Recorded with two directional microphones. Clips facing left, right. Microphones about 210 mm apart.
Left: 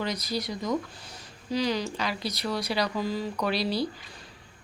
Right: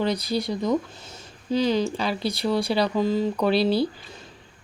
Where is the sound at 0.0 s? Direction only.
30° right (ahead or behind).